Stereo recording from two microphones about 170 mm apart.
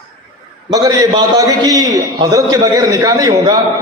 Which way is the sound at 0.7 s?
25° right (ahead or behind).